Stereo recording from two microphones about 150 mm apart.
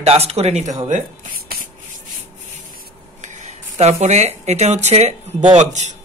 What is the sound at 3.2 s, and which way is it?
Speech, 50° right (ahead or behind).